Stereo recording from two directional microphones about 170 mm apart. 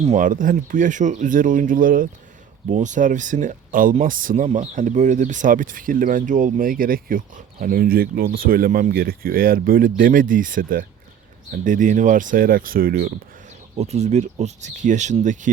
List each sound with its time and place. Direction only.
0.0 s speech: 45° right (ahead or behind)
13.7 s speech: 40° right (ahead or behind)